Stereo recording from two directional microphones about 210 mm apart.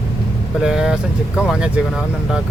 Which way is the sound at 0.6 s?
5° right (ahead or behind).